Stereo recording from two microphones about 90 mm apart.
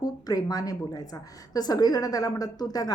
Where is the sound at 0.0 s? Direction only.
45° left (ahead or behind).